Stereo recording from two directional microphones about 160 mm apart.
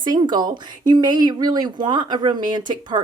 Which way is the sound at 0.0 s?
30° right (ahead or behind).